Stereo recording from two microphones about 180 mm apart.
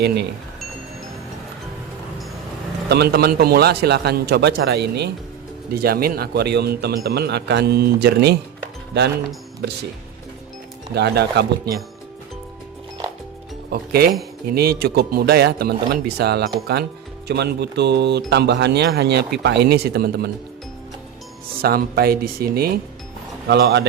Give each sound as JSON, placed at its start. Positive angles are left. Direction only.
{"t": 0.0, "sound": "a man's voice", "side_deg": -60}
{"t": 2.9, "sound": "a man's voice", "side_deg": -65}
{"t": 5.7, "sound": "a man's voice", "side_deg": -55}
{"t": 10.9, "sound": "a man's voice", "side_deg": -65}
{"t": 13.7, "sound": "a man's voice", "side_deg": -60}
{"t": 21.6, "sound": "a man's voice", "side_deg": -55}